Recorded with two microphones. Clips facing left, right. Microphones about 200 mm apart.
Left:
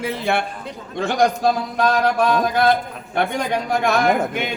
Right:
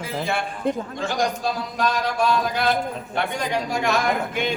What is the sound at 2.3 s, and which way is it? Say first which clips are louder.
Speech: left 4 dB; 55° left (ahead or behind).